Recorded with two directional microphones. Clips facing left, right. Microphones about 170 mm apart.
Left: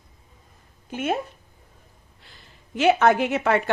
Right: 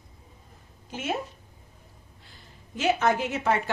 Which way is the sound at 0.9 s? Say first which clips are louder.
Left 6 dB; 55° left (ahead or behind).